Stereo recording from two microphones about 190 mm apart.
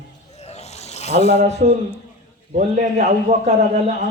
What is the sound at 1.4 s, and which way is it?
A man's voice, 35° right (ahead or behind).